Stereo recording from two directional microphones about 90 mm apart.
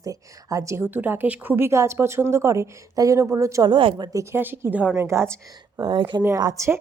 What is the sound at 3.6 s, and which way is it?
Speech, 70° right (ahead or behind).